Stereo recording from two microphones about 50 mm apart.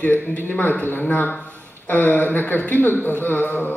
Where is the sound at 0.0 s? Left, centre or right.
Left.